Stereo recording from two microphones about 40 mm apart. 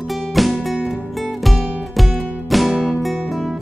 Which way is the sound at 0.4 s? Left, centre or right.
Centre.